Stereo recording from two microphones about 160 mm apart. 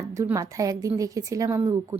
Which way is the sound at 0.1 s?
20° right (ahead or behind).